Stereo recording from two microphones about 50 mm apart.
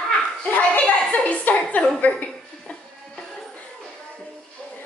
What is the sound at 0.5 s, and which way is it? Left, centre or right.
Chuckle, left.